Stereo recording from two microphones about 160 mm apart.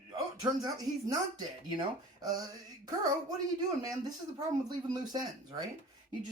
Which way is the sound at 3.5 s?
25° right (ahead or behind).